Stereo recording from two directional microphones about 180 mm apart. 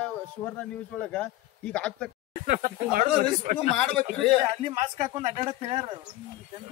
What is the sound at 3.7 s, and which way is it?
Speech, 5° left (ahead or behind).